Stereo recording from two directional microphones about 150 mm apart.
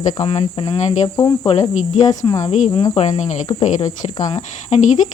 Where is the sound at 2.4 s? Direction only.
50° left (ahead or behind).